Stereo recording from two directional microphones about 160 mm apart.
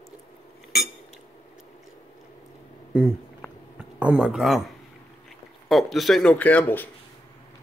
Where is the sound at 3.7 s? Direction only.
5° right (ahead or behind).